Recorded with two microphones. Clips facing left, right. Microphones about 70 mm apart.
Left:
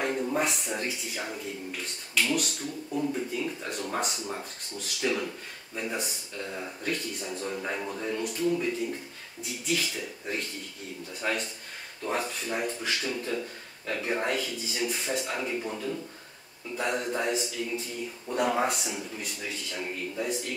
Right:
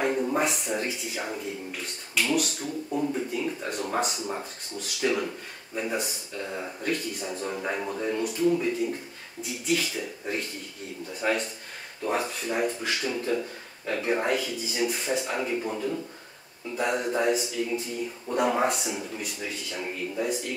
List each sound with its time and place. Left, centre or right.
0.0 s speech: centre
8.5 s speech: centre